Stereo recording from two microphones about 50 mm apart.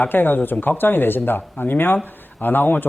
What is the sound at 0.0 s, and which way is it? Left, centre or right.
Speech, left.